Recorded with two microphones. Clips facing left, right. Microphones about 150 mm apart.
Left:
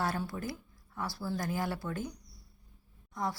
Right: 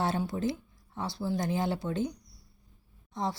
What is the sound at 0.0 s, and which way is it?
Speech, 20° right (ahead or behind).